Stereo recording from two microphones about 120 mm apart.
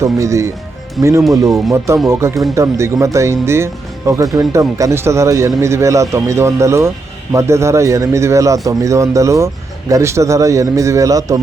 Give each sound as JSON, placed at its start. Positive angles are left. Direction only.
{"t": 0.0, "sound": "speech", "side_deg": -25}
{"t": 1.0, "sound": "speech", "side_deg": 0}
{"t": 2.0, "sound": "speech", "side_deg": -25}